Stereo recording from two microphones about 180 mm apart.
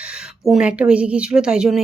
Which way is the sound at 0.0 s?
5° right (ahead or behind).